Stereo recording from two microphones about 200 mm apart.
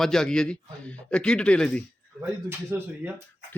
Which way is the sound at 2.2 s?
10° right (ahead or behind).